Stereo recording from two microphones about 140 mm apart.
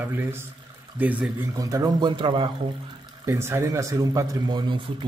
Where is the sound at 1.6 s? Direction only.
25° right (ahead or behind).